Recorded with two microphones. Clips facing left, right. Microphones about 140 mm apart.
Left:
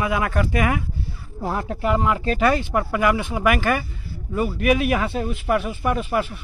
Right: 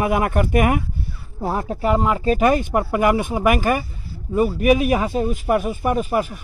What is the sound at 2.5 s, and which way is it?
Speech, 45° right (ahead or behind).